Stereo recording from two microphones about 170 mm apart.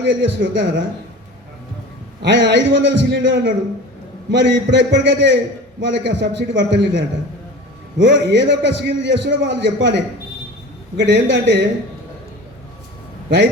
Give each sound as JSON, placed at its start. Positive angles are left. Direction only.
{"t": 0.0, "sound": "a man's voice", "side_deg": -90}
{"t": 2.2, "sound": "a man's voice", "side_deg": -90}